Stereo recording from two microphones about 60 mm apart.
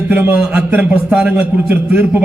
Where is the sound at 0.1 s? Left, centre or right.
Right.